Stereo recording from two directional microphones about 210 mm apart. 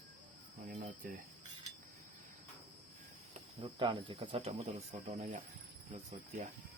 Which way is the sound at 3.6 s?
20° right (ahead or behind).